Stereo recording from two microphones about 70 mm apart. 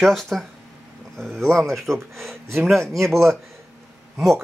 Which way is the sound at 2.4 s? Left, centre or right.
Right.